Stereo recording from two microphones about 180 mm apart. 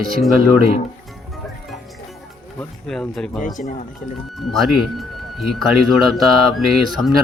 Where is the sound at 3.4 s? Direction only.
45° left (ahead or behind).